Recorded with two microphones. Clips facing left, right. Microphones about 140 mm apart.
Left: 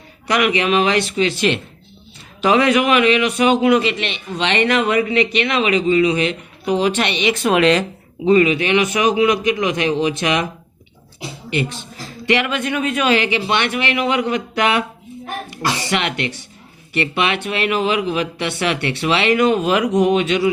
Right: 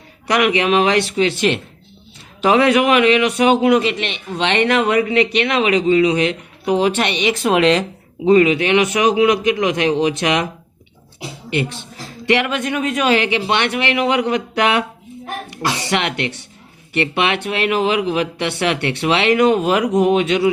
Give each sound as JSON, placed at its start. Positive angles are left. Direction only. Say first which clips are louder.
{"t": 0.3, "sound": "speech", "louder": "right 1 dB", "side_deg": -60}
{"t": 3.6, "sound": "a man's voice", "louder": "right 1 dB", "side_deg": -45}
{"t": 7.4, "sound": "speech", "louder": "even", "side_deg": -30}
{"t": 8.2, "sound": "a man's voice", "louder": "right 1 dB", "side_deg": -65}
{"t": 12.3, "sound": "speech", "louder": "right 1 dB", "side_deg": -50}
{"t": 15.9, "sound": "speech", "louder": "right 1 dB", "side_deg": -60}